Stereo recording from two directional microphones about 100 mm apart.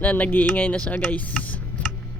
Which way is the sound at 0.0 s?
20° left (ahead or behind).